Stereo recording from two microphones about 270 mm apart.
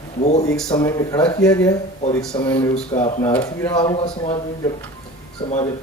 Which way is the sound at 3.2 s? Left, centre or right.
Centre.